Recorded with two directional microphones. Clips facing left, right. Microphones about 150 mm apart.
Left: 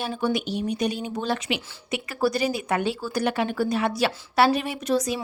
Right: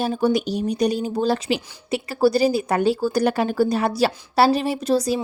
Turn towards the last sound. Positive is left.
turn(degrees=-35)  # may be behind; listen again after turning